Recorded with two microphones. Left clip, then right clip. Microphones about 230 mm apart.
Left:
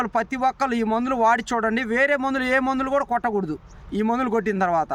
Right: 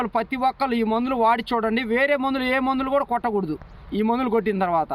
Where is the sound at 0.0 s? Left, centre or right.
Centre.